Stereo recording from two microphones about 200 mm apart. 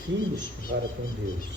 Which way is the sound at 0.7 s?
65° right (ahead or behind).